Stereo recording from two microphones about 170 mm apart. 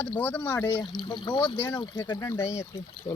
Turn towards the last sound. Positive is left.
turn(degrees=25)  # may be behind; listen again after turning